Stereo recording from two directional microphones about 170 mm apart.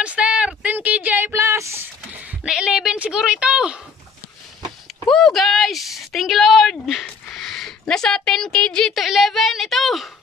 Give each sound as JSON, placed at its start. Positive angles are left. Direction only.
{"t": 0.0, "sound": "speech", "side_deg": -5}
{"t": 5.0, "sound": "speech", "side_deg": 0}